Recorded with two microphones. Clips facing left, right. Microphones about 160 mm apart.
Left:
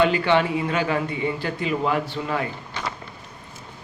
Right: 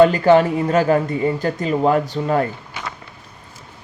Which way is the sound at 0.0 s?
40° right (ahead or behind).